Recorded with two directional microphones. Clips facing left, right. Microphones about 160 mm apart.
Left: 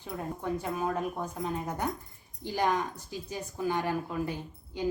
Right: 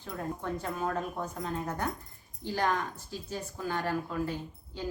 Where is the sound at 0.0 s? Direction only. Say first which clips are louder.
Left 1 dB; 10° left (ahead or behind).